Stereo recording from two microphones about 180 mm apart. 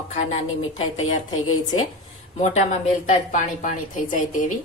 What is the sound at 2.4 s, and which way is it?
A woman's voice, 40° left (ahead or behind).